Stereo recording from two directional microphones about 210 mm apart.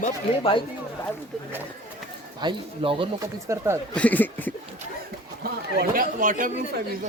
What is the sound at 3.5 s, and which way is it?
Speech, 15° right (ahead or behind).